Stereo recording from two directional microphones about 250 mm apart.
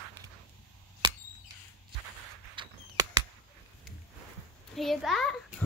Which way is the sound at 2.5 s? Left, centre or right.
Centre.